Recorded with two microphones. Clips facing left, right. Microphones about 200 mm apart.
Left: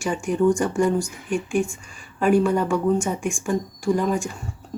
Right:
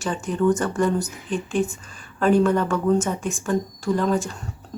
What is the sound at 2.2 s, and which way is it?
Speech, 10° left (ahead or behind).